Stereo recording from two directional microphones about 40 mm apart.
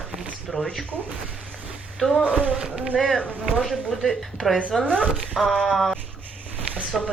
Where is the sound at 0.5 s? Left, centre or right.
Right.